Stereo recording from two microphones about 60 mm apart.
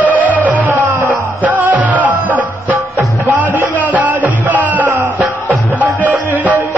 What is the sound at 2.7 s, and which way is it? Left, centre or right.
Music, right.